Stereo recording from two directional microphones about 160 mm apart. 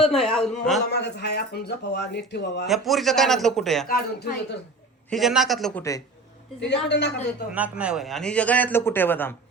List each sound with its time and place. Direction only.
0.0 s a man's voice: centre (ahead or behind)
0.9 s speech: 90° left
2.6 s a man's voice: centre (ahead or behind)
3.8 s speech: 70° left (ahead or behind)
5.1 s a man's voice: centre (ahead or behind)
6.6 s speech: 90° left
7.5 s a man's voice: 10° right (ahead or behind); by 9.3 s 15° left (ahead or behind)